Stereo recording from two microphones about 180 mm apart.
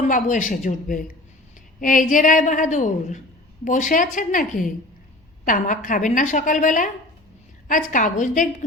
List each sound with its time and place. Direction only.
0.0 s a woman's voice: 45° left (ahead or behind)